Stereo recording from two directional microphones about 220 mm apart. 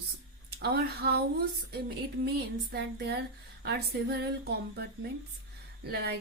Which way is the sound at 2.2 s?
45° right (ahead or behind).